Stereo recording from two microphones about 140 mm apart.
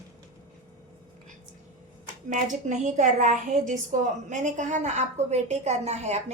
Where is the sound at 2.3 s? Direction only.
65° right (ahead or behind).